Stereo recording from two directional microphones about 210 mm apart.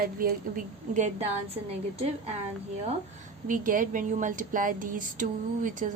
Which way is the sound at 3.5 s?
40° right (ahead or behind).